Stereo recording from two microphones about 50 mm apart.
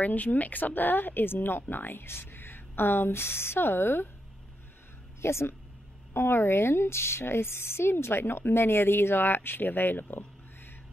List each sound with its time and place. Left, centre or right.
0.0 s speech: left
5.2 s speech: left